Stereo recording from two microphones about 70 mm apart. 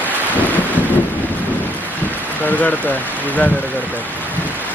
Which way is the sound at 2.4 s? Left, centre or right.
Left.